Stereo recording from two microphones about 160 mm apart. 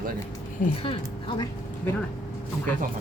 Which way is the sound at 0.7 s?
35° left (ahead or behind).